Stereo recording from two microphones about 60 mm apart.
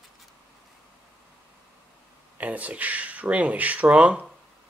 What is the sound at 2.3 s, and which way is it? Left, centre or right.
Speech, right.